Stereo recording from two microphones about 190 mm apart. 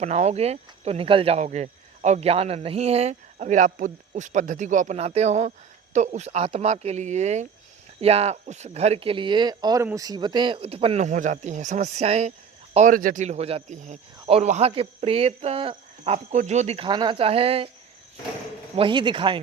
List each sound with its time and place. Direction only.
0.0 s speech: 35° right (ahead or behind)
18.8 s speech: 25° right (ahead or behind)